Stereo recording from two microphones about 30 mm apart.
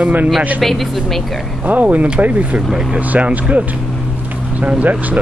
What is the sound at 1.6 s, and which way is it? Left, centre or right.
Speech, right.